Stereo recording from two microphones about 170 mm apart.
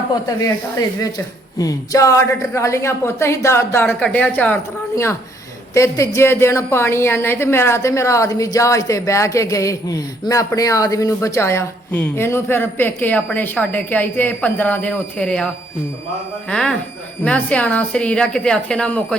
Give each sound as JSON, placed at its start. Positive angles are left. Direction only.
{"t": 0.3, "sound": "a woman's voice", "side_deg": 20}
{"t": 16.5, "sound": "a woman's voice", "side_deg": 5}